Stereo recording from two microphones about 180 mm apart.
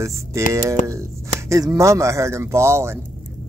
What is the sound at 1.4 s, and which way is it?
Speech, 15° right (ahead or behind).